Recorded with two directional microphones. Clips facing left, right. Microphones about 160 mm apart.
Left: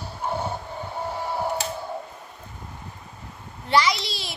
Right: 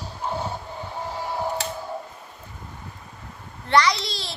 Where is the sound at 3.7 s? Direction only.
5° left (ahead or behind).